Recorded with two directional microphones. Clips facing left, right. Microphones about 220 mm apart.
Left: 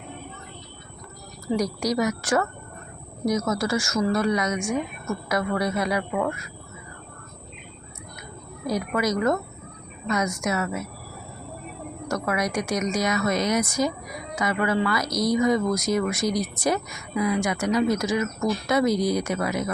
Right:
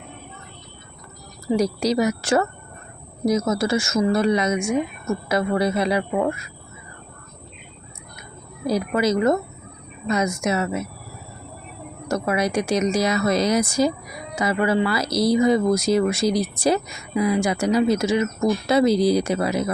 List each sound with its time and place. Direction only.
1.5 s speech: 25° right (ahead or behind)
8.6 s speech: 30° right (ahead or behind)
12.0 s speech: 25° right (ahead or behind)